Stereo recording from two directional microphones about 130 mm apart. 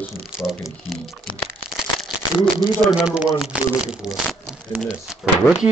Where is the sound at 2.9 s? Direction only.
5° right (ahead or behind).